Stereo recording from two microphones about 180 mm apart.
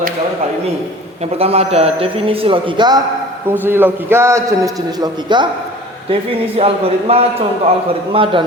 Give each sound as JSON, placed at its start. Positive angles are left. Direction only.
{"t": 1.2, "sound": "a man's voice", "side_deg": -35}
{"t": 3.5, "sound": "a man's voice", "side_deg": -10}
{"t": 6.6, "sound": "a man's voice", "side_deg": -35}